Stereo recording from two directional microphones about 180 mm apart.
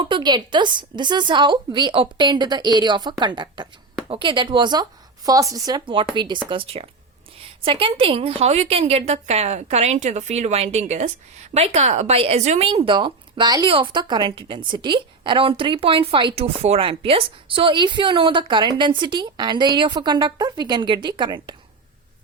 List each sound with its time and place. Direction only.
0.0 s a woman's voice: 25° right (ahead or behind)